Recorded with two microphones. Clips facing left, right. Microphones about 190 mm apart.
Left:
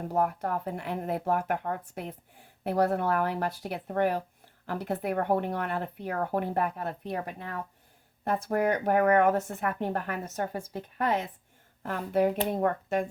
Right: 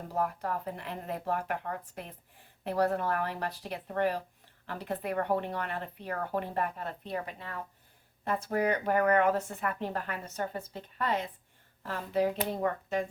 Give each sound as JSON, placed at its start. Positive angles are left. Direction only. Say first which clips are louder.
{"t": 0.1, "sound": "speech", "louder": "left 3 dB", "side_deg": 55}